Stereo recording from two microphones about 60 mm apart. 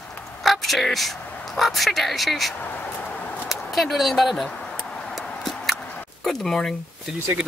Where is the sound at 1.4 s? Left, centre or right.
Centre.